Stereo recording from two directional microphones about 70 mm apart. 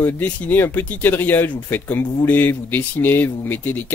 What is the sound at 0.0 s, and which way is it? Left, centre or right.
Speech, left.